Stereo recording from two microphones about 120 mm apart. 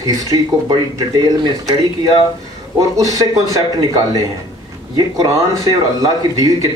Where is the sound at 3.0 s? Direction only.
30° right (ahead or behind).